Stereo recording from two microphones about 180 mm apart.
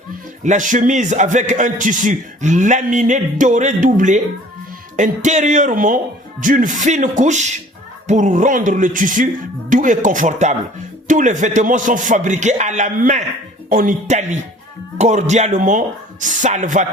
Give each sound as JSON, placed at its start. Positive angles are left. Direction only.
{"t": 0.4, "sound": "a man's voice", "side_deg": -45}